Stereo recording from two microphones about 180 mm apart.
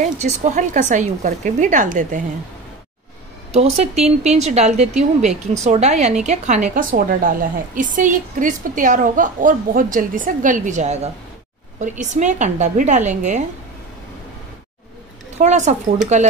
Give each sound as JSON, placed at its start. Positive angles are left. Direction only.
{"t": 0.0, "sound": "a woman's voice", "side_deg": -40}
{"t": 3.5, "sound": "a woman's voice", "side_deg": -35}
{"t": 15.3, "sound": "speech", "side_deg": -40}